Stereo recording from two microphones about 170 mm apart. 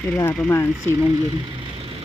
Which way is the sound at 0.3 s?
10° left (ahead or behind).